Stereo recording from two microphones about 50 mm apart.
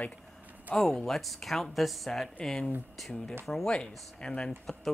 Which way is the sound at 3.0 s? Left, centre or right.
Centre.